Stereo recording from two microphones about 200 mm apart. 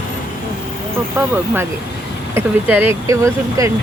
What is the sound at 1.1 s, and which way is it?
Speech, 10° right (ahead or behind).